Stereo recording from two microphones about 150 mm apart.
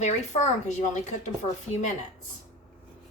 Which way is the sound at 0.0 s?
50° left (ahead or behind).